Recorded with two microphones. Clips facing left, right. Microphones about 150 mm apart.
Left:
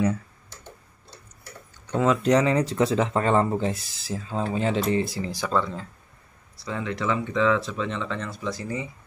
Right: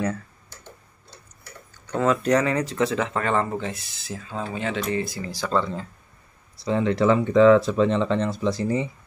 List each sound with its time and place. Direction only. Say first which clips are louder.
1.9 s speech: even; 15° left (ahead or behind)
5.4 s speech: right 2 dB; centre (ahead or behind)
6.5 s speech: right 8 dB; 25° right (ahead or behind)